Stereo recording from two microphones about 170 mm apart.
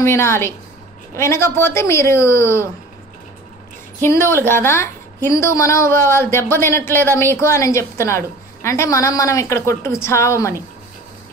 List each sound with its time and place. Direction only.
0.0 s a woman's voice: 15° left (ahead or behind)
4.0 s a woman's voice: 15° left (ahead or behind)